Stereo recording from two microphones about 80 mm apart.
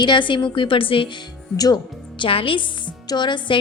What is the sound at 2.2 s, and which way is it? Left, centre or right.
A woman's voice, left.